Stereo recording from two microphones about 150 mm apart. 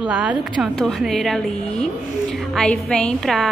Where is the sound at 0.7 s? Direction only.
Centre (ahead or behind).